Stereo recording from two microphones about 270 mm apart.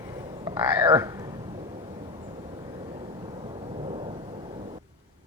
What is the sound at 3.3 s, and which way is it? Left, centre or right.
Thunder, right.